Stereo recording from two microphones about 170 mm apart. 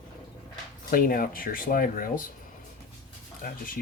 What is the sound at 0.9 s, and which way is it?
Speech, 60° left (ahead or behind).